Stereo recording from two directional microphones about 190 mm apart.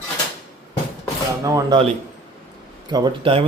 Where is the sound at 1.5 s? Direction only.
20° right (ahead or behind).